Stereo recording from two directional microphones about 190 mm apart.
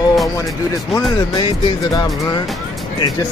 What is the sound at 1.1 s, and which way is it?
Speech, 20° left (ahead or behind).